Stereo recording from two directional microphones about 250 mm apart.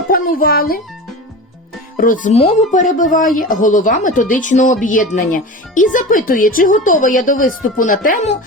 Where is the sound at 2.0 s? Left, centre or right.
Left.